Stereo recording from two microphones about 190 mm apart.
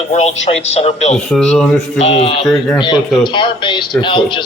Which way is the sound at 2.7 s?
25° left (ahead or behind).